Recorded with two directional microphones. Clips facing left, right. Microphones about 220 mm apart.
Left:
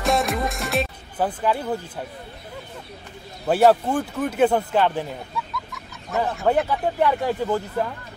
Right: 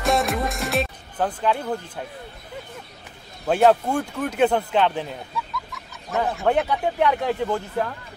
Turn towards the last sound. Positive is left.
turn(degrees=5)  # may be behind; listen again after turning